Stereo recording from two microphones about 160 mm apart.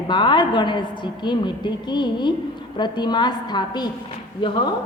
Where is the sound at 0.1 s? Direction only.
30° left (ahead or behind).